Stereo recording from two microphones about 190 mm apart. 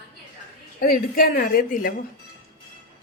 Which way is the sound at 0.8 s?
50° left (ahead or behind).